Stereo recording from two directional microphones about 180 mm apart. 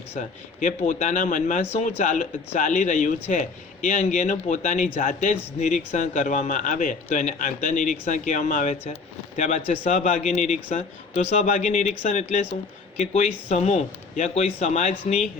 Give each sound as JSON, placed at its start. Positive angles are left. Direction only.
{"t": 0.1, "sound": "a man's voice", "side_deg": 45}